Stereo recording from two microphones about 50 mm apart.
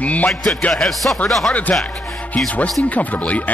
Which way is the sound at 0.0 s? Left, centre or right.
Left.